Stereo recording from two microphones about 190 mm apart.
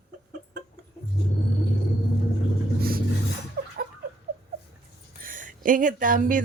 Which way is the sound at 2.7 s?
50° right (ahead or behind).